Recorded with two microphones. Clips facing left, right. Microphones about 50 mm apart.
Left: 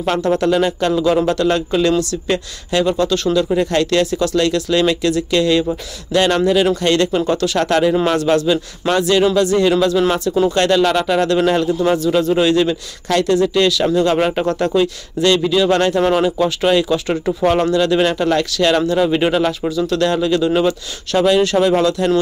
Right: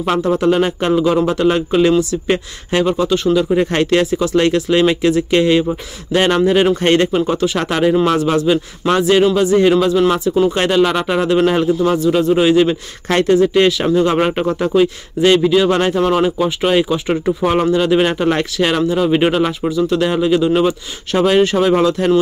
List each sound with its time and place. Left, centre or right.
0.0 s a man's voice: centre
0.5 s a man's voice: right
11.8 s a man's voice: centre
16.0 s speech: centre
16.3 s a man's voice: centre
18.8 s a man's voice: centre
19.0 s a man's voice: centre
21.1 s speech: right